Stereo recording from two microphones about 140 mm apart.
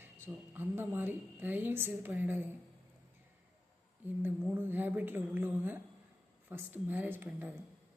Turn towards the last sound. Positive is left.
turn(degrees=-15)  # may be behind; listen again after turning